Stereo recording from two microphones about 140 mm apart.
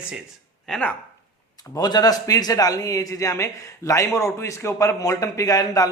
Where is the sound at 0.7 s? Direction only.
10° left (ahead or behind).